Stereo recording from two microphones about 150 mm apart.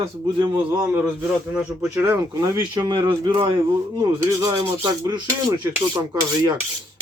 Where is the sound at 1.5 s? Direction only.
15° right (ahead or behind).